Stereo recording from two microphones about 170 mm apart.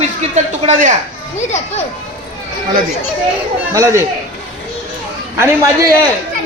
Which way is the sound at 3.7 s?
15° right (ahead or behind).